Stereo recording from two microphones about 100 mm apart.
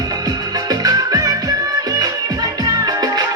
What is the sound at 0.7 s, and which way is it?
Music, 40° right (ahead or behind).